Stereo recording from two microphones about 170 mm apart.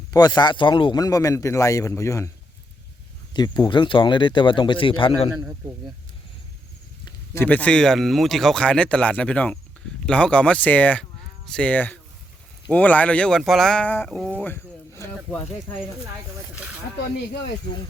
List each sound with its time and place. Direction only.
0.1 s a man's voice: 25° left (ahead or behind)
3.3 s a man's voice: 25° left (ahead or behind)
7.3 s speech: 10° left (ahead or behind)
16.6 s a sound: 10° right (ahead or behind)